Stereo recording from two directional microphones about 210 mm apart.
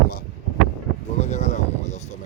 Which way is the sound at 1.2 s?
35° left (ahead or behind).